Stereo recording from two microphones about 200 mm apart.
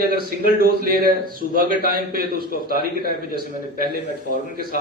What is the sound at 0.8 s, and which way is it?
A man's voice, 45° right (ahead or behind).